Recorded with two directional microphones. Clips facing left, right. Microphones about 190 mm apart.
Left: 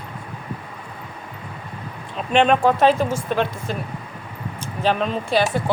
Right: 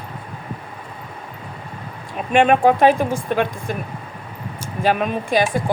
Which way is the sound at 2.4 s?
55° right (ahead or behind).